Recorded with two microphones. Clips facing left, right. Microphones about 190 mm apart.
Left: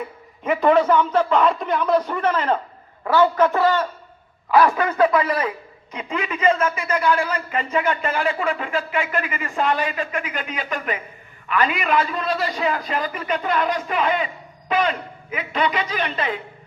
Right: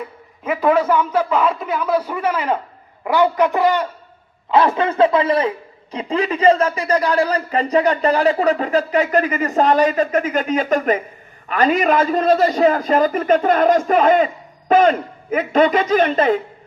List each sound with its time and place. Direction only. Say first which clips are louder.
0.4 s a man's voice: even; 5° right (ahead or behind); by 16.4 s 45° right (ahead or behind)